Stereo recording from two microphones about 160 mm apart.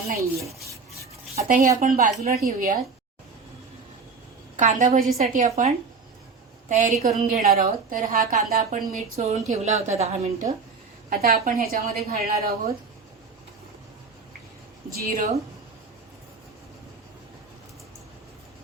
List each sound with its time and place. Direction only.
0.2 s rub: 20° right (ahead or behind)
1.8 s a woman's voice: 55° right (ahead or behind)
4.5 s a woman's voice: 50° right (ahead or behind)
11.1 s a woman's voice: 65° right (ahead or behind)
14.9 s a woman's voice: 65° right (ahead or behind)